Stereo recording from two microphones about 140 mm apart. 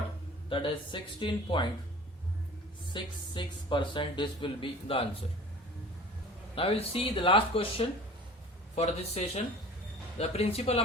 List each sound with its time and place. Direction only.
0.5 s speech: 35° left (ahead or behind)
2.9 s speech: 35° left (ahead or behind)
6.6 s a man's voice: 45° left (ahead or behind)